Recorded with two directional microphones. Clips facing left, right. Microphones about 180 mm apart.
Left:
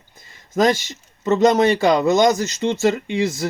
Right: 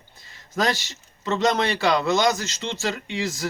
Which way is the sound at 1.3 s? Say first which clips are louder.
Left 7 dB; 45° left (ahead or behind).